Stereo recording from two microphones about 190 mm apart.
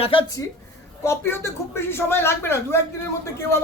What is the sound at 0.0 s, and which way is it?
Speech, 25° left (ahead or behind).